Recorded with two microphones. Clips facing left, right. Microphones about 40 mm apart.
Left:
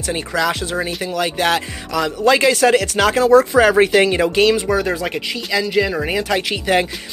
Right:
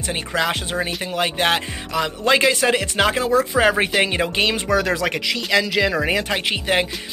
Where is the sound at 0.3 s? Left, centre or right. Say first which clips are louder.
Left 2 dB; right.